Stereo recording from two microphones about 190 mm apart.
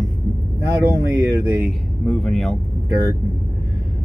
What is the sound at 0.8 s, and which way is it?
Speech, 15° right (ahead or behind).